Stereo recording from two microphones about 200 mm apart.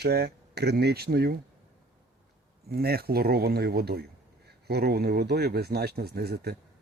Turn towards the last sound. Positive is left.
turn(degrees=-50)  # may be behind; listen again after turning